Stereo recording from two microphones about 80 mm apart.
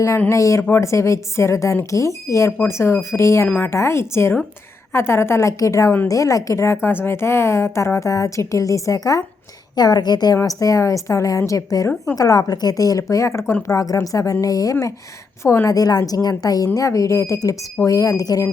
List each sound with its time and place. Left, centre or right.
0.3 s a woman's voice: left
9.7 s a woman's voice: left
10.3 s speech: left